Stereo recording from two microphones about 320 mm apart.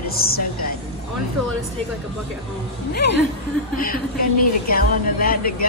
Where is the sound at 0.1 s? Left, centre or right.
Left.